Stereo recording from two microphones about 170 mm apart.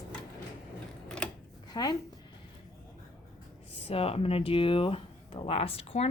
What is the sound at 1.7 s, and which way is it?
Speech, 25° left (ahead or behind).